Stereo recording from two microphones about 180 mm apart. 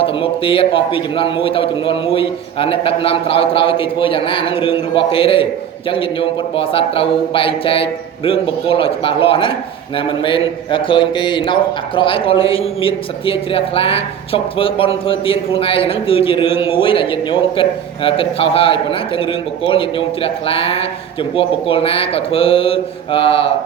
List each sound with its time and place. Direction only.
0.0 s a man's voice: 30° left (ahead or behind)